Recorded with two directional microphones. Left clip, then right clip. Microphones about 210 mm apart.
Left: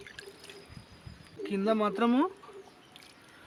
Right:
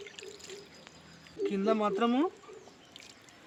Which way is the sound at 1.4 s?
35° left (ahead or behind).